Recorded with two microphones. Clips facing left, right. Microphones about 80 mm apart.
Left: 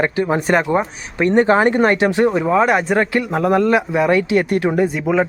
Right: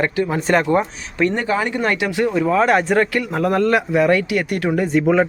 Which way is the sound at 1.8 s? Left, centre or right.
Left.